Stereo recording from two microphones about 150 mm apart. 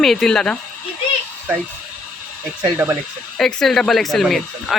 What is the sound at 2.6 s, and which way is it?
Speech, 10° right (ahead or behind).